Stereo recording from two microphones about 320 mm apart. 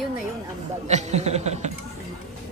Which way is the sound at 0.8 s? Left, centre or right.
Right.